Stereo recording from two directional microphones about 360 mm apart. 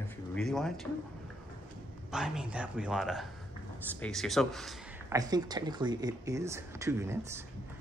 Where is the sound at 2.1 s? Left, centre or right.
Centre.